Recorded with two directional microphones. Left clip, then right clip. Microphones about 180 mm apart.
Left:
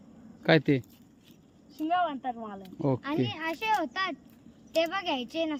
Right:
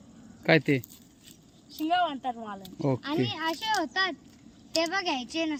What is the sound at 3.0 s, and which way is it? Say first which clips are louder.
A child's voice: right 2 dB; 20° left (ahead or behind).